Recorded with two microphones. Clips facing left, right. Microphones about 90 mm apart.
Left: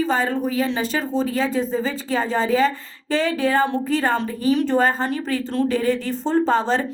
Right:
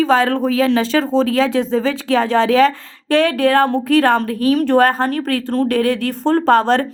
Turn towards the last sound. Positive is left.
turn(degrees=-65)  # may be behind; listen again after turning